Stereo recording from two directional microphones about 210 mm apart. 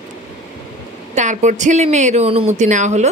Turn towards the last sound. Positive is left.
turn(degrees=-35)  # may be behind; listen again after turning